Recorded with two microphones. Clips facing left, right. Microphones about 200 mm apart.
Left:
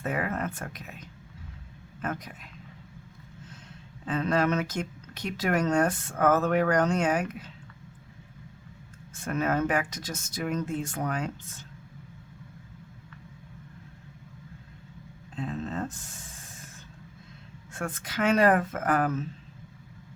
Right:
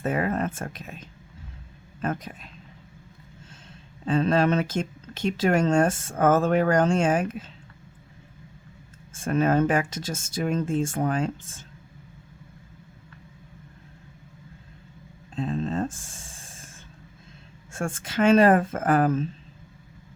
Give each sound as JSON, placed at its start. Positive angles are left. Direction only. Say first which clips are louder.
{"t": 0.0, "sound": "speech", "louder": "right 5 dB", "side_deg": -25}
{"t": 4.0, "sound": "speech", "louder": "right 4 dB", "side_deg": -30}
{"t": 9.1, "sound": "speech", "louder": "right 6 dB", "side_deg": -25}
{"t": 15.4, "sound": "a sound", "louder": "right 5 dB", "side_deg": -30}
{"t": 16.1, "sound": "hiss", "louder": "right 1 dB", "side_deg": -25}
{"t": 17.7, "sound": "speech", "louder": "right 5 dB", "side_deg": -25}